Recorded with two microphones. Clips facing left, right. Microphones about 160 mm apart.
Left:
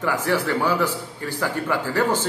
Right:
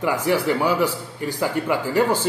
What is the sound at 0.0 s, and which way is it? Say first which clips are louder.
A man's voice: right 2 dB; 15° right (ahead or behind).